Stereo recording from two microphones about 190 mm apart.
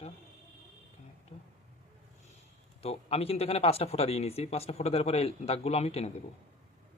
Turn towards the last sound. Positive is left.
turn(degrees=35)  # may be behind; listen again after turning